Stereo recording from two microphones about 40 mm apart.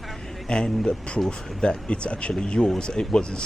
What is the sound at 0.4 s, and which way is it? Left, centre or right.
Speech, centre.